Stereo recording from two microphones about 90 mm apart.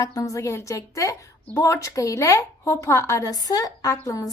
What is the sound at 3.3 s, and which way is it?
Speech, 45° left (ahead or behind).